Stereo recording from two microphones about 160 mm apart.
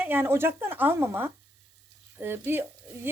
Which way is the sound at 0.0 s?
15° right (ahead or behind).